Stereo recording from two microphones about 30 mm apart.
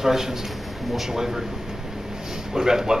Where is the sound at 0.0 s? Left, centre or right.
Centre.